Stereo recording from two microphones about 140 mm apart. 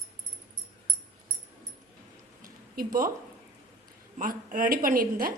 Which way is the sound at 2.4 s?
90° right.